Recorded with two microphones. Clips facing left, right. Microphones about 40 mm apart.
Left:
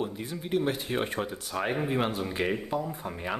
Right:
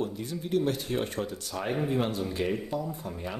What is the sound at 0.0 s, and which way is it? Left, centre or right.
Speech, centre.